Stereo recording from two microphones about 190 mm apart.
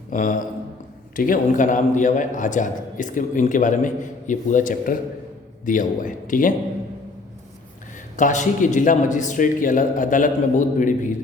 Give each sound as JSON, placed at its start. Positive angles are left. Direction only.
{"t": 0.1, "sound": "a man's voice", "side_deg": 45}
{"t": 8.1, "sound": "a man's voice", "side_deg": 40}